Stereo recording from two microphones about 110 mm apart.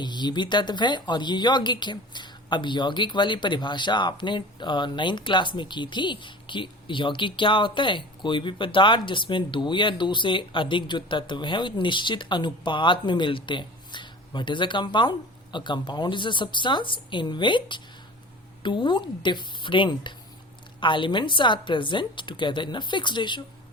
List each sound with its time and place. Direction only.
0.0 s a woman's voice: 40° left (ahead or behind)